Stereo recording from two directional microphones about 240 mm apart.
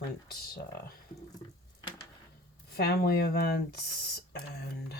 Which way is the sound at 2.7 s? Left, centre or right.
Left.